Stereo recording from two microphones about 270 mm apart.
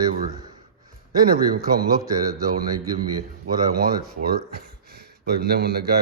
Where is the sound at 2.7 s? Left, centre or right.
Right.